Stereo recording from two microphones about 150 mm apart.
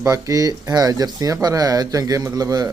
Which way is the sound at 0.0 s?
20° right (ahead or behind).